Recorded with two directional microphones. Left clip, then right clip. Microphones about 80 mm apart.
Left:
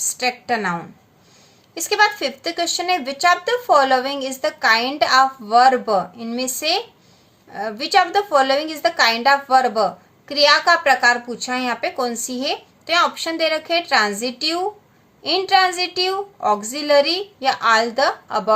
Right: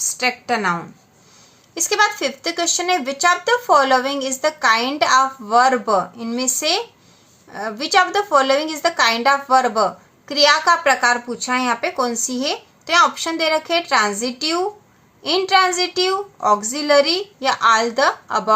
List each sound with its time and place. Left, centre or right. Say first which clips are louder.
0.2 s speech: right 1 dB; right
0.6 s speech: right 3 dB; right
9.0 s speech: even; right